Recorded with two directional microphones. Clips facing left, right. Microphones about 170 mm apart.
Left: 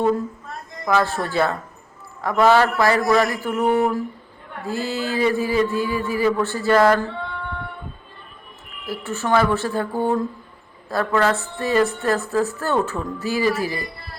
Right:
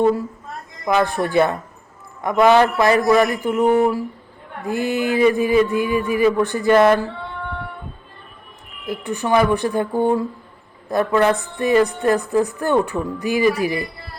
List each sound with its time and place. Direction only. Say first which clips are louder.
0.9 s a woman's voice: right 2 dB; 15° right (ahead or behind)
8.9 s a woman's voice: right 2 dB; 15° right (ahead or behind)